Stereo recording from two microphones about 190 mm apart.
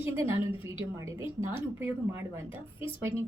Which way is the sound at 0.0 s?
15° right (ahead or behind).